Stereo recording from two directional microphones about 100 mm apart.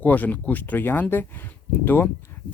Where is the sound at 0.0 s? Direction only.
15° left (ahead or behind).